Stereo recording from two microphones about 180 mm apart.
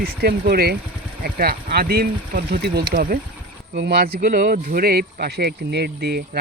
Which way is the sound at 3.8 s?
65° right (ahead or behind).